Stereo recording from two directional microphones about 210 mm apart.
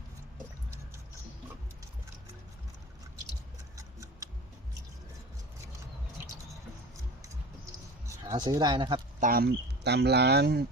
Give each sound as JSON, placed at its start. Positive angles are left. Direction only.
{"t": 8.0, "sound": "speech", "side_deg": -15}
{"t": 9.2, "sound": "speech", "side_deg": -45}